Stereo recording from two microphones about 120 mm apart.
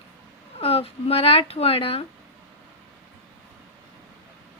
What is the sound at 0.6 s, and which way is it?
Speech, 55° left (ahead or behind).